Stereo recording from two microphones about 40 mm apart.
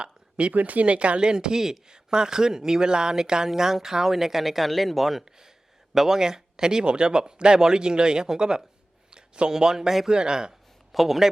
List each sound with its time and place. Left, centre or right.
0.0 s a sound: right
0.5 s speech: right; by 10.1 s centre
10.1 s speech: centre
10.9 s speech: centre